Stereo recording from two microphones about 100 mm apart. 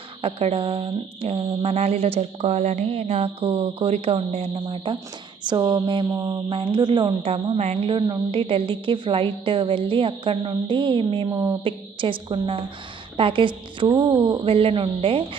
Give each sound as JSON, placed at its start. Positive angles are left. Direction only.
{"t": 0.2, "sound": "speech", "side_deg": -75}
{"t": 4.6, "sound": "a woman's voice", "side_deg": -55}
{"t": 5.5, "sound": "a sound", "side_deg": -50}
{"t": 6.1, "sound": "mantra", "side_deg": -40}
{"t": 6.5, "sound": "a sound", "side_deg": -60}
{"t": 7.2, "sound": "a woman's voice", "side_deg": -90}
{"t": 11.3, "sound": "mantra", "side_deg": -40}
{"t": 11.6, "sound": "a woman's voice", "side_deg": -60}